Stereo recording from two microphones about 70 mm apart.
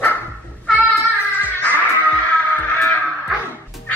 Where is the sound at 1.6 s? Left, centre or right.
Left.